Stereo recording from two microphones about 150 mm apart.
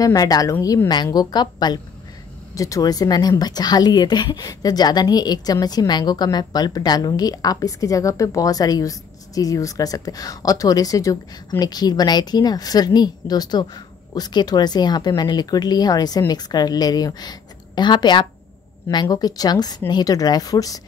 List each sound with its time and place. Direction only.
0.0 s a woman's voice: 25° left (ahead or behind)